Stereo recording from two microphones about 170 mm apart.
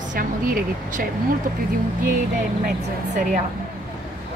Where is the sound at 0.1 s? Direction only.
55° right (ahead or behind).